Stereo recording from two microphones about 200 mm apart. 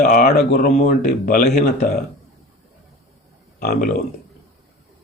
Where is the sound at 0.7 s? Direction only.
35° left (ahead or behind).